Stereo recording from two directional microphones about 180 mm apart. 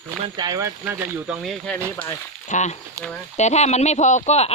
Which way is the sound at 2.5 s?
40° left (ahead or behind).